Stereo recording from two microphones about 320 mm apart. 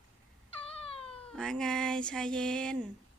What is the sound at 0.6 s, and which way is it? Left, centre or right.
Cat, centre.